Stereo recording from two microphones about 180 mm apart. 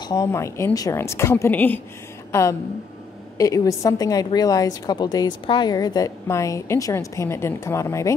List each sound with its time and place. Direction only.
0.0 s a woman's voice: 20° left (ahead or behind)
3.3 s a woman's voice: 20° left (ahead or behind)